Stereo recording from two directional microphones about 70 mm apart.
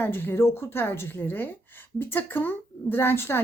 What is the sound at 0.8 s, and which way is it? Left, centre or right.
A woman's voice, left.